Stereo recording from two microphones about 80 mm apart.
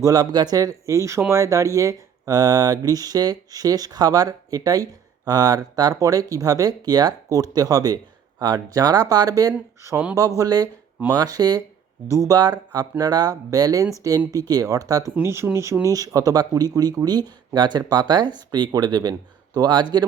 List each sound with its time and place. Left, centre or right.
0.0 s speech: right
12.1 s speech: right
12.4 s speech: right
15.2 s speech: right
15.8 s speech: right